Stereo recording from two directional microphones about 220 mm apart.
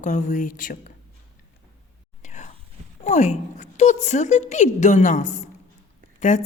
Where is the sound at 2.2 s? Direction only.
35° left (ahead or behind).